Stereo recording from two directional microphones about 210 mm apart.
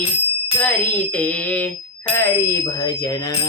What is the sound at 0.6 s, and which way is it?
Music, 5° left (ahead or behind).